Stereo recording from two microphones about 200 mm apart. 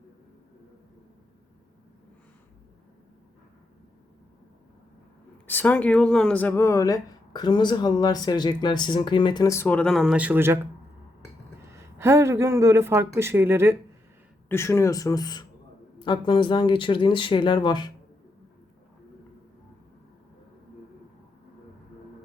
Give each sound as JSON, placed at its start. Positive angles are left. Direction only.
{"t": 5.5, "sound": "speech", "side_deg": 10}
{"t": 11.7, "sound": "speech", "side_deg": -15}
{"t": 14.5, "sound": "speech", "side_deg": 15}